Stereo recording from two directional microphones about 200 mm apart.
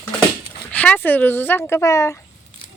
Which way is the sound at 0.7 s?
10° left (ahead or behind).